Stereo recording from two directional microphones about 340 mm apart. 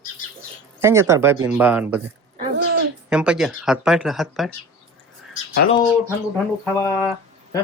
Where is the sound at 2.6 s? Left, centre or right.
Right.